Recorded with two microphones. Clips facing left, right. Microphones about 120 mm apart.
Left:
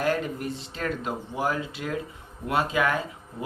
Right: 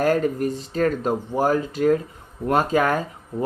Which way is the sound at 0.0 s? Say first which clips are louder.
Right 7 dB; 45° right (ahead or behind).